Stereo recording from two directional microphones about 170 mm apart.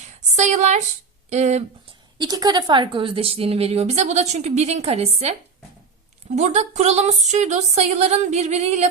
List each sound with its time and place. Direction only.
0.1 s a woman's voice: 40° right (ahead or behind)
2.1 s a woman's voice: 25° right (ahead or behind); by 8.9 s 40° right (ahead or behind)